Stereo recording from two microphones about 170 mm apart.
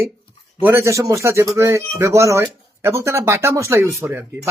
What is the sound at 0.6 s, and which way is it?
Speech, 15° right (ahead or behind).